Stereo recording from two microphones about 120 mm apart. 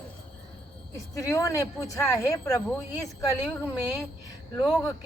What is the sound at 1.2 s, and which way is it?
Speech, 25° left (ahead or behind).